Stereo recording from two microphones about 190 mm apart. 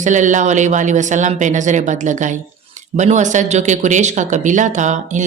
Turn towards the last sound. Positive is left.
turn(degrees=-40)  # may be behind; listen again after turning